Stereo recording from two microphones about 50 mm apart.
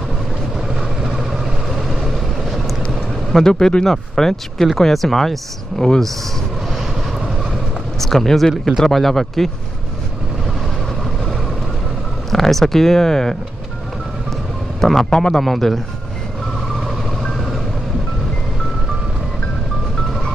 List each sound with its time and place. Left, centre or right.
0.7 s vehicle: centre
3.4 s speech: centre
8.0 s speech: centre
12.3 s speech: centre
14.8 s speech: centre
15.1 s speech: centre
15.4 s speech: centre